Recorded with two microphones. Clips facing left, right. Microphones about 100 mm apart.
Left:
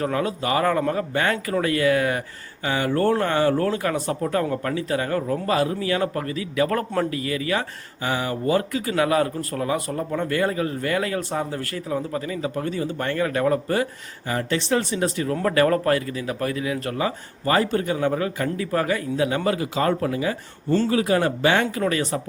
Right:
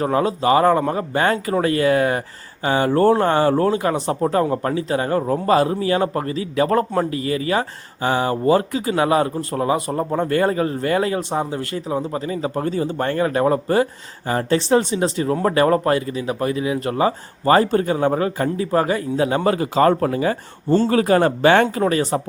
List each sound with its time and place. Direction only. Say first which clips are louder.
0.0 s a man's voice: right 6 dB; 30° right (ahead or behind)
17.1 s a man's voice: right 7 dB; 35° right (ahead or behind)
20.7 s speech: right 4 dB; 30° right (ahead or behind)
20.9 s speech: right 5 dB; 45° right (ahead or behind)
21.8 s a man's voice: right 4 dB; 35° right (ahead or behind)